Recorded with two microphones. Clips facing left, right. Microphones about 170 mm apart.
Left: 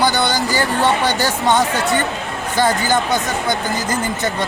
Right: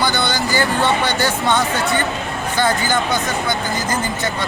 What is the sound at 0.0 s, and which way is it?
Speech, 40° left (ahead or behind).